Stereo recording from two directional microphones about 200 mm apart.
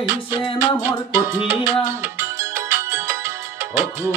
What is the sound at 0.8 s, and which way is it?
Music, 10° right (ahead or behind).